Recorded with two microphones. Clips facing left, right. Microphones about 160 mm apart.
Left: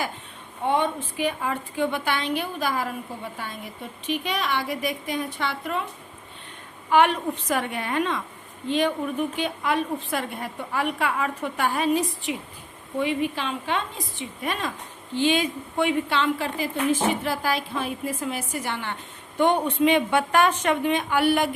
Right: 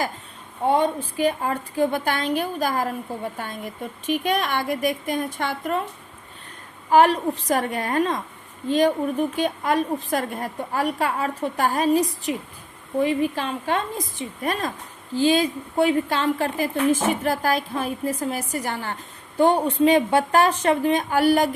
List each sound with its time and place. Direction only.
0.7 s a woman's voice: 40° right (ahead or behind)
6.9 s a woman's voice: 35° right (ahead or behind)